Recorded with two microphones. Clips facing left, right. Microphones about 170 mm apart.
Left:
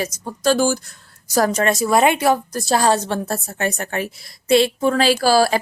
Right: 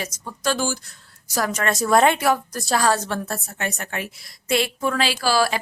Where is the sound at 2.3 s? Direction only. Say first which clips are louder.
Left 3 dB; 25° left (ahead or behind).